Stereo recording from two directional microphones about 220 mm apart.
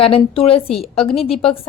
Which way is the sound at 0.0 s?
25° left (ahead or behind).